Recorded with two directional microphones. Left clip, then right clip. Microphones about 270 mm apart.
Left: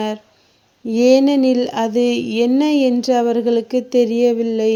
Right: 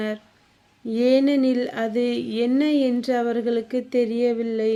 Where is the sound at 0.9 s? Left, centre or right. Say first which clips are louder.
Left 6 dB; centre.